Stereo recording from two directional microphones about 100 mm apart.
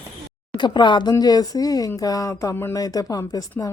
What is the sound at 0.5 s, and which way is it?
A woman's voice, 50° left (ahead or behind).